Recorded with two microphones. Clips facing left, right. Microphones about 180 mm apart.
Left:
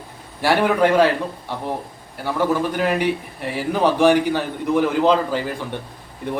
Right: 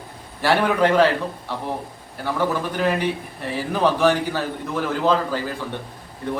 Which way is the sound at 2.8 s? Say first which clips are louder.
Left 2 dB; 10° left (ahead or behind).